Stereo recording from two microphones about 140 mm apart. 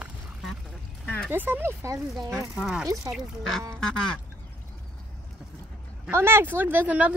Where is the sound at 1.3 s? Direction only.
15° right (ahead or behind).